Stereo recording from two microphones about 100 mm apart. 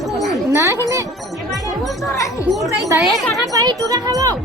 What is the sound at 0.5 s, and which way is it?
Speech, 25° right (ahead or behind).